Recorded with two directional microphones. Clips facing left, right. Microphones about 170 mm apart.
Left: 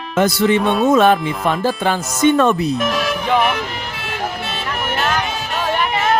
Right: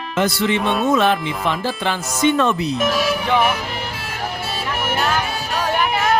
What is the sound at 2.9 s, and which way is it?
Speech, 5° right (ahead or behind).